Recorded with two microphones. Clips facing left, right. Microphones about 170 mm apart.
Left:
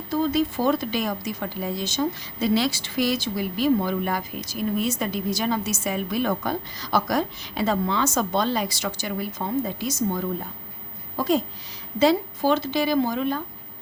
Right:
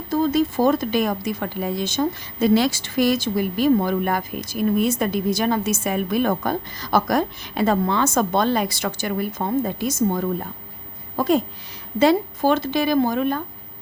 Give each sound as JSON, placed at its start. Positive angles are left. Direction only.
{"t": 0.1, "sound": "speech", "side_deg": -45}